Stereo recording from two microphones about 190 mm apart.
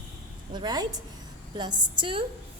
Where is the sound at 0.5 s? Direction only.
20° right (ahead or behind).